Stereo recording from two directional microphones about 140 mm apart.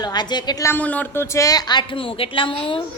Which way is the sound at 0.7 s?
10° left (ahead or behind).